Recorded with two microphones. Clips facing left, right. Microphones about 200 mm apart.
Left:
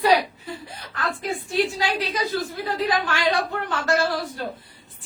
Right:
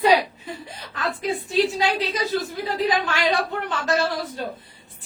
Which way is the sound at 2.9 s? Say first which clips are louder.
Even; 20° right (ahead or behind).